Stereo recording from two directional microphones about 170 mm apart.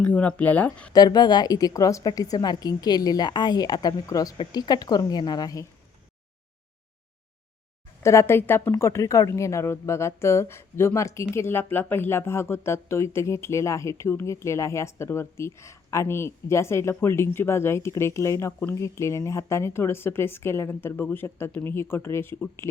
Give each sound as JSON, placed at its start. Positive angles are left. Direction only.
{"t": 0.0, "sound": "speech", "side_deg": 10}
{"t": 0.9, "sound": "a woman's voice", "side_deg": 25}
{"t": 8.0, "sound": "speech", "side_deg": 15}